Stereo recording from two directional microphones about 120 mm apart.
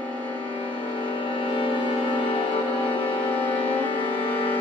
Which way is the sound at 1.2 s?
45° left (ahead or behind).